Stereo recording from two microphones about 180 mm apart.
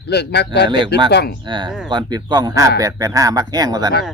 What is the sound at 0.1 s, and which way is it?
Speech, 65° left (ahead or behind).